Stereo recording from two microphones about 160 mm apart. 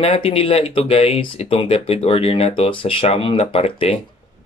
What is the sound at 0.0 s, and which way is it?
Speech, 35° left (ahead or behind).